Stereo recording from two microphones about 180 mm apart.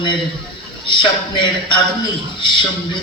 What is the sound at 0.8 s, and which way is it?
A man's voice, 25° left (ahead or behind).